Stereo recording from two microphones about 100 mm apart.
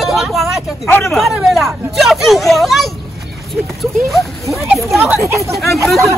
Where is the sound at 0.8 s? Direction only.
25° left (ahead or behind).